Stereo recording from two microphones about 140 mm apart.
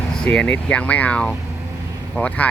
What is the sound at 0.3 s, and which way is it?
Speech, 10° left (ahead or behind).